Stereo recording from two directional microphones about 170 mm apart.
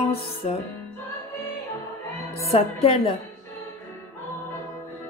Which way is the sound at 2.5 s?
35° left (ahead or behind).